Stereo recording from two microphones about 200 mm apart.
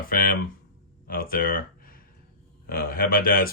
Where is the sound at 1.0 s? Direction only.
45° left (ahead or behind).